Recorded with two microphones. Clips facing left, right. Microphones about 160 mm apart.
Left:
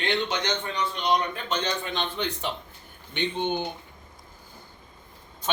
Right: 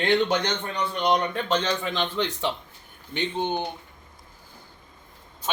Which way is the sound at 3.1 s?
35° right (ahead or behind).